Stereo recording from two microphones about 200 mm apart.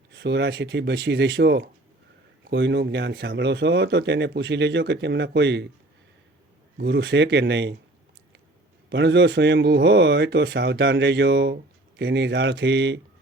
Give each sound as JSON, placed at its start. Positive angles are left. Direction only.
{"t": 0.1, "sound": "speech", "side_deg": -60}
{"t": 6.7, "sound": "speech", "side_deg": -65}
{"t": 8.9, "sound": "speech", "side_deg": -60}